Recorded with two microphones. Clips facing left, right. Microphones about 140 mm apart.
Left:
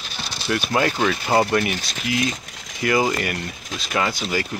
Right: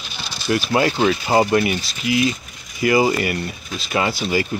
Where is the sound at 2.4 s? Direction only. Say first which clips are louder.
Left 2 dB; 90° left.